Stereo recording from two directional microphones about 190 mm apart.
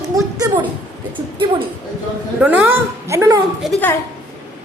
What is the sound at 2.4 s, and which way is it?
A woman's voice, 10° right (ahead or behind).